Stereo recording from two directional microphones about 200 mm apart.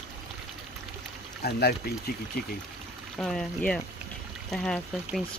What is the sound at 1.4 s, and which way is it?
Speech, 50° left (ahead or behind).